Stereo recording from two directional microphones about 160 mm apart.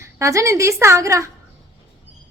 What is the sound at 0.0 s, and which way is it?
A woman's voice, 20° right (ahead or behind).